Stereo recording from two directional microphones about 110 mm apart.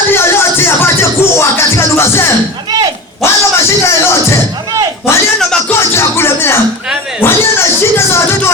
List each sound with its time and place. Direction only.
0.1 s music: 20° left (ahead or behind)
5.7 s music: 25° left (ahead or behind)